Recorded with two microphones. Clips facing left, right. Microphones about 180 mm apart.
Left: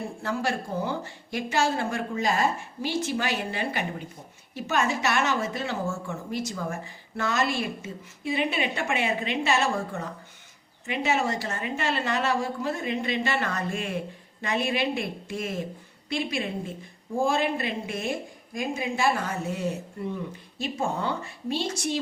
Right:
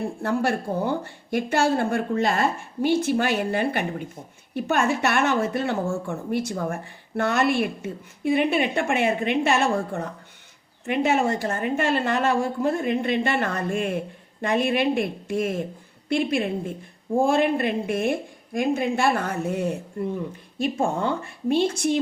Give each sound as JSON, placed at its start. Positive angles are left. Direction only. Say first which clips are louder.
{"t": 0.2, "sound": "speech", "louder": "right 5 dB", "side_deg": -55}